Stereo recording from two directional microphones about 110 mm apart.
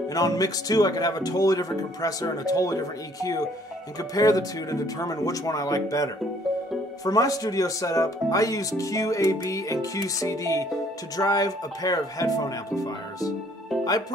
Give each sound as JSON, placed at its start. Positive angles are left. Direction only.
{"t": 0.1, "sound": "speech", "side_deg": 35}
{"t": 7.1, "sound": "speech", "side_deg": 35}